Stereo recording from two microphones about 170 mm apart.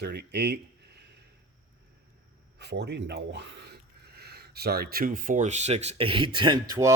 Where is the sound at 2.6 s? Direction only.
85° right.